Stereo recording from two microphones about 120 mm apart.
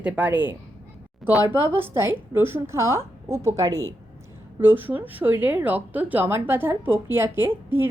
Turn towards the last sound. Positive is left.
turn(degrees=-15)  # may be behind; listen again after turning